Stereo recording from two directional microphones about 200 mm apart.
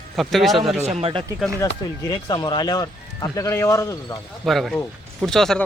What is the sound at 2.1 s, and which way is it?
Speech, 20° left (ahead or behind).